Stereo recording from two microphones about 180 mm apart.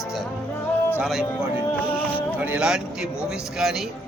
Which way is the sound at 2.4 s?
5° right (ahead or behind).